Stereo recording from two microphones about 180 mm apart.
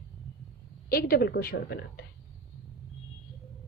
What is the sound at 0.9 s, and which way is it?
A woman's voice, 60° left (ahead or behind).